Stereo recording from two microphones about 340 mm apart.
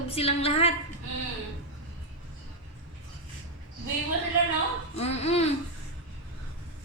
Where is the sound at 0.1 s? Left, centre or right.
Centre.